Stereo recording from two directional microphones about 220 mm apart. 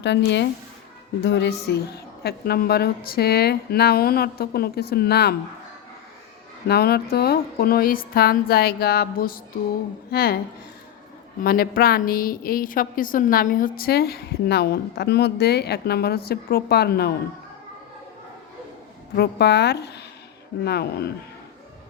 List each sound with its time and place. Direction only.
0.0 s a woman's voice: 50° left (ahead or behind)
6.7 s a woman's voice: 45° left (ahead or behind)
11.4 s a woman's voice: 40° left (ahead or behind)
19.1 s a woman's voice: 50° left (ahead or behind)